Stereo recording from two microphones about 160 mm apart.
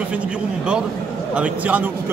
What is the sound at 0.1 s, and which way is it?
Speech, 5° right (ahead or behind).